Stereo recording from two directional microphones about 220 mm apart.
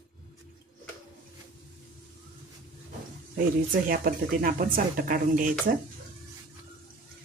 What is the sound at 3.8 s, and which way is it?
Speech, 40° right (ahead or behind).